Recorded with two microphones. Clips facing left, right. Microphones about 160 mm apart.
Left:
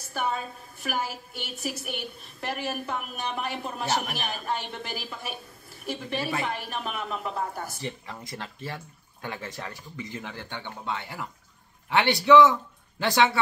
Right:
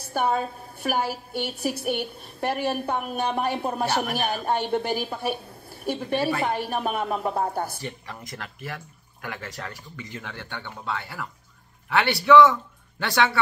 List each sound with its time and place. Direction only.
0.1 s a woman's voice: 35° right (ahead or behind)
7.8 s speech: 25° left (ahead or behind)